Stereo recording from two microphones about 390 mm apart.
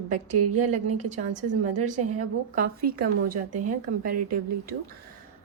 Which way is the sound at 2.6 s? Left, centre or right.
Right.